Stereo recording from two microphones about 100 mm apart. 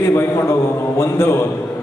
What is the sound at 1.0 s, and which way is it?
Speech, 25° left (ahead or behind).